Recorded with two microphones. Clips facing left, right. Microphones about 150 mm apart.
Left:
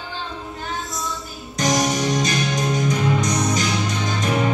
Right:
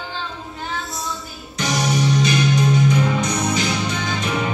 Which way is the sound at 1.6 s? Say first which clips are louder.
Left 1 dB; 40° left (ahead or behind).